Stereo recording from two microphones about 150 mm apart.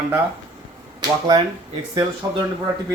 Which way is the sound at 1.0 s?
30° right (ahead or behind).